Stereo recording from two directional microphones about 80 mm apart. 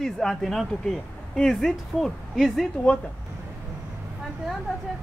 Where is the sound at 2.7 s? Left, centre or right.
Centre.